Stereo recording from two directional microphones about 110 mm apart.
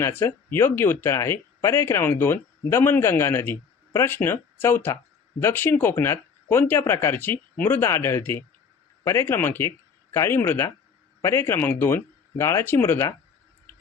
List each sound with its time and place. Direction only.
0.0 s speech: 20° left (ahead or behind)